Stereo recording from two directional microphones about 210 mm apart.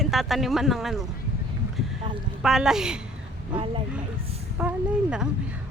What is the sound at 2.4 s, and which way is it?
Speech, centre (ahead or behind).